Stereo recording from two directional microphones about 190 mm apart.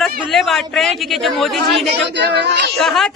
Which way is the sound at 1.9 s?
60° right (ahead or behind).